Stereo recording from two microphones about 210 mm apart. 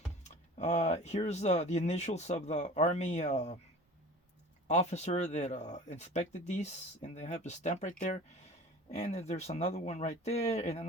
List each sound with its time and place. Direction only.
0.3 s speech: 35° left (ahead or behind)
4.7 s speech: 35° left (ahead or behind)